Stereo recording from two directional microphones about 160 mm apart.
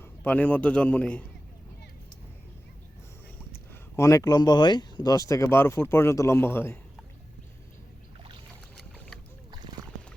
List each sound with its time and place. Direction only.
0.0 s a man's voice: 10° left (ahead or behind)
3.9 s speech: 20° left (ahead or behind)